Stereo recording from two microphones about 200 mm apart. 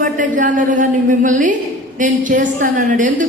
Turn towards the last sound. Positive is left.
turn(degrees=-40)  # may be behind; listen again after turning